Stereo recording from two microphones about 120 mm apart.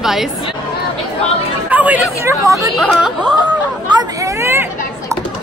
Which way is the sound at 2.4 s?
25° right (ahead or behind).